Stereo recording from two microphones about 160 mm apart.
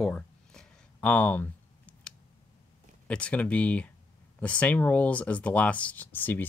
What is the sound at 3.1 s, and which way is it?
Speech, 5° left (ahead or behind).